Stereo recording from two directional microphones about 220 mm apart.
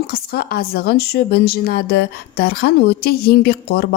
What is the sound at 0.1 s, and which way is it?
A woman's voice, 45° left (ahead or behind).